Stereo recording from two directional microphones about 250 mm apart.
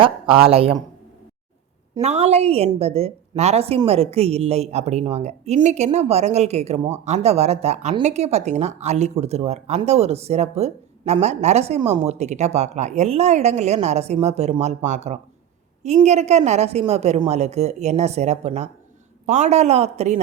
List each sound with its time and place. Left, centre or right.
0.0 s speech: right
2.0 s speech: right